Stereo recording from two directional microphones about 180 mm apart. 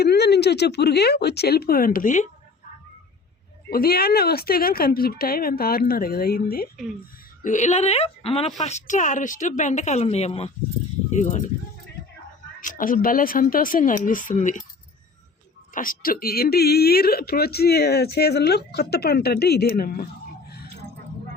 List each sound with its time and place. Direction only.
0.0 s a woman's voice: 65° left (ahead or behind); by 2.3 s 45° left (ahead or behind)
3.7 s a woman's voice: 55° left (ahead or behind)
7.4 s a woman's voice: 40° left (ahead or behind)
12.5 s speech: 50° left (ahead or behind)
15.7 s a woman's voice: 50° left (ahead or behind)